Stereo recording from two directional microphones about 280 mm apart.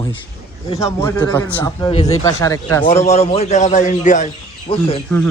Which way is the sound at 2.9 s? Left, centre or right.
Left.